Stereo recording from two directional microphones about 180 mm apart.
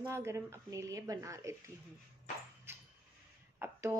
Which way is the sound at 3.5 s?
15° right (ahead or behind).